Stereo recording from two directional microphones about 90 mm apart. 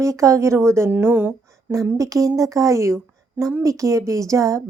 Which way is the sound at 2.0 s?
35° right (ahead or behind).